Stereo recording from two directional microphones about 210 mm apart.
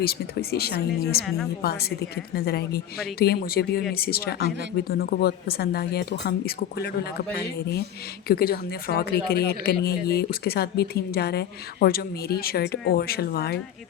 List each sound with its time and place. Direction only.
0.0 s speech: 45° left (ahead or behind)